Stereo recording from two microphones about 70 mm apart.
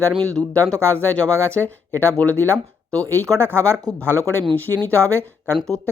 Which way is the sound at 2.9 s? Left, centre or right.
Right.